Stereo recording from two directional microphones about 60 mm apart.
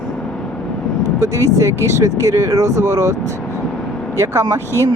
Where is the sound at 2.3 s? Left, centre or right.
Right.